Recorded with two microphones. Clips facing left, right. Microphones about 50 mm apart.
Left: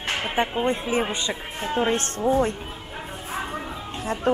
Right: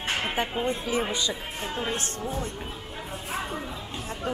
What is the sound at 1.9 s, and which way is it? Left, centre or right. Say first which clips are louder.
Speech: left 10 dB; left.